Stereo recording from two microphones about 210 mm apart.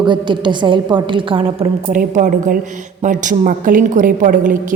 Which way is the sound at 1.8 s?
40° right (ahead or behind).